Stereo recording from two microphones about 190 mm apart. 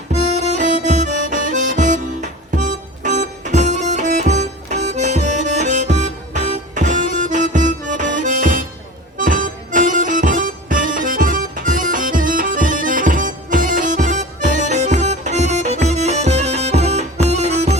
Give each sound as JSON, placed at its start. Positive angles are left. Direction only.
{"t": 0.1, "sound": "music", "side_deg": -35}